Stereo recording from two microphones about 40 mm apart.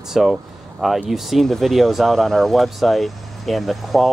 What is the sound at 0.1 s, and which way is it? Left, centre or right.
Speech, centre.